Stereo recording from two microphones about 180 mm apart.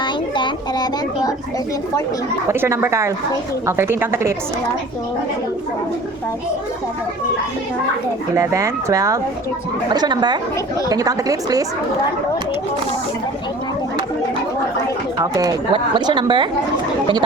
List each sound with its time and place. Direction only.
0.0 s a sound: 25° left (ahead or behind)
2.5 s speech: 15° right (ahead or behind)
8.4 s speech: 15° right (ahead or behind)
15.2 s speech: 20° right (ahead or behind)